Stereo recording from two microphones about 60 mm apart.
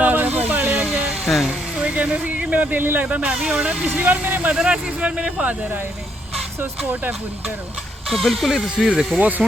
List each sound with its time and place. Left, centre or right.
0.0 s a sound: right
0.9 s a sound: centre
1.5 s speech: centre
3.2 s speech: centre
3.9 s speech: right
6.6 s speech: right
8.0 s speech: centre
9.1 s speech: right